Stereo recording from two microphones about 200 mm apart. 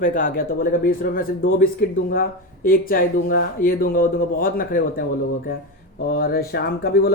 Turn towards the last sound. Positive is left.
turn(degrees=50)  # may be behind; listen again after turning